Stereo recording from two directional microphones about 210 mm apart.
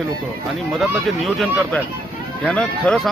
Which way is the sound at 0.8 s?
Centre (ahead or behind).